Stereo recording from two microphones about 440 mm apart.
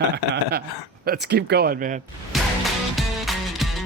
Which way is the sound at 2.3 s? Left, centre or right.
Centre.